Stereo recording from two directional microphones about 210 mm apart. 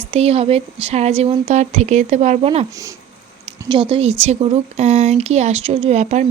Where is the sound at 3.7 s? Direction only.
25° right (ahead or behind).